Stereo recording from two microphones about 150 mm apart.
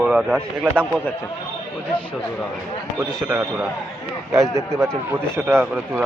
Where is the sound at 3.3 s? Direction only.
10° right (ahead or behind).